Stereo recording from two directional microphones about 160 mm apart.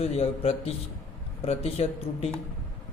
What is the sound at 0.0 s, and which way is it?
A man's voice, 40° left (ahead or behind).